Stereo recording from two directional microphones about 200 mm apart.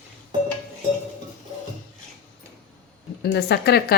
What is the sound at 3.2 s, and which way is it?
Speech, 55° left (ahead or behind).